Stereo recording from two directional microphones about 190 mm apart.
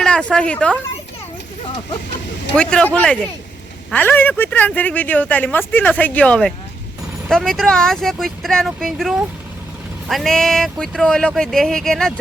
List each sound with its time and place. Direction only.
0.0 s speech: 5° left (ahead or behind)
1.6 s speech: 25° left (ahead or behind)
2.6 s speech: 5° left (ahead or behind)